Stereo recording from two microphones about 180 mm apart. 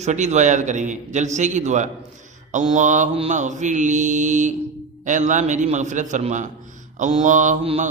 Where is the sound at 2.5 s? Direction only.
40° right (ahead or behind).